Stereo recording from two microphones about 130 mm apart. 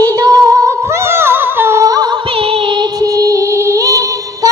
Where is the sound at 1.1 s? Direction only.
15° right (ahead or behind).